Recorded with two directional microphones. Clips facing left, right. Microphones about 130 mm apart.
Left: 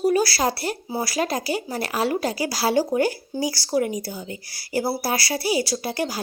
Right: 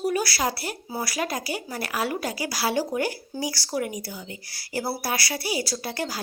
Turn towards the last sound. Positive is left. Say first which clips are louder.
# left 4 dB
turn(degrees=25)  # may be behind; listen again after turning